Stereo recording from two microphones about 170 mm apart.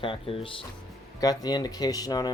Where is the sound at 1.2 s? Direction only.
25° left (ahead or behind).